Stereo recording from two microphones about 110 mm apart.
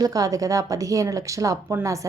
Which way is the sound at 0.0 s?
35° right (ahead or behind).